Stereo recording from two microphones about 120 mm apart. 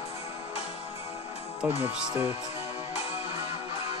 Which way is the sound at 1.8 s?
20° right (ahead or behind).